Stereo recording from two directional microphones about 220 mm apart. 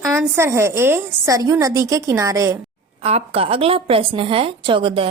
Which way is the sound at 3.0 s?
25° right (ahead or behind).